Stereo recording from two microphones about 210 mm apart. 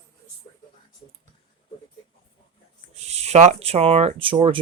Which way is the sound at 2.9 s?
30° right (ahead or behind).